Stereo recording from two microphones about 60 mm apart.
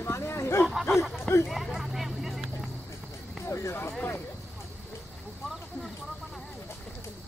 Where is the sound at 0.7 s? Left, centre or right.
Centre.